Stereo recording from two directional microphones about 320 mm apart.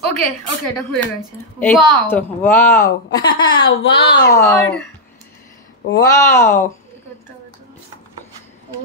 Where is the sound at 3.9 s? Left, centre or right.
Centre.